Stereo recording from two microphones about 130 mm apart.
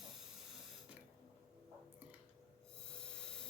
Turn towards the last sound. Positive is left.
turn(degrees=5)  # may be behind; listen again after turning